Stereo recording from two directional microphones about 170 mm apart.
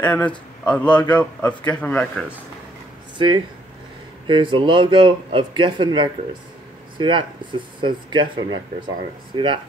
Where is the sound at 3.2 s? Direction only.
30° right (ahead or behind).